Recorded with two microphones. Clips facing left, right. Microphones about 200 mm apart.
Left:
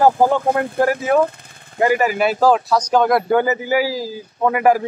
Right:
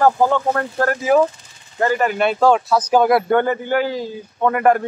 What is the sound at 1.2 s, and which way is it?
Vehicle, 55° left (ahead or behind).